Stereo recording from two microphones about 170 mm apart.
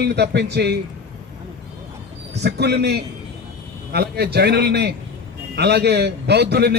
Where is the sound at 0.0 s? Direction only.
80° right.